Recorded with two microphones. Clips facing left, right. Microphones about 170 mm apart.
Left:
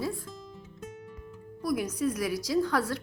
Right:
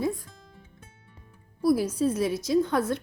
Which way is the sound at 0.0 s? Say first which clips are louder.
Right 4 dB; 20° right (ahead or behind).